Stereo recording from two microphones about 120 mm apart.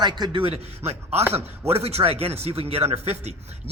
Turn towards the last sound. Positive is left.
turn(degrees=-60)  # may be behind; listen again after turning